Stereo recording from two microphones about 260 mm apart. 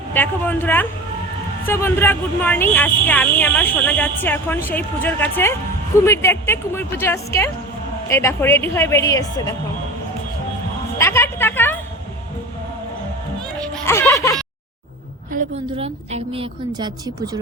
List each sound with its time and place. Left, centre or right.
0.1 s speech: centre
10.9 s music: centre
13.8 s music: centre
15.3 s a woman's voice: right